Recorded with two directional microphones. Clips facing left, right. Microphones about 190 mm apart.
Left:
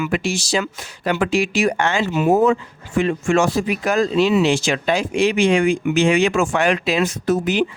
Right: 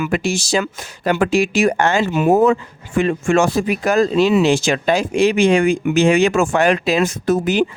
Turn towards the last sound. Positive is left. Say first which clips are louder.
# right 2 dB
turn(degrees=-45)  # may be behind; listen again after turning